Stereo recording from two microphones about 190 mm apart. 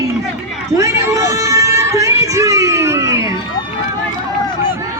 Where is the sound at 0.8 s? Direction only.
15° right (ahead or behind).